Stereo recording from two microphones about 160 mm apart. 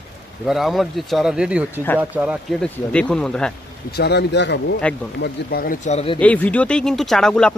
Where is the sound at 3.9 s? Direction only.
90° left.